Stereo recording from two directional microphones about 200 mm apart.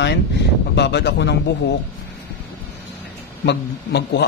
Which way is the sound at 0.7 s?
60° left (ahead or behind).